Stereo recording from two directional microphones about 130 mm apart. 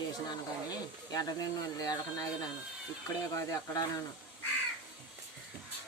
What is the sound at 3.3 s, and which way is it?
Speech, 25° left (ahead or behind).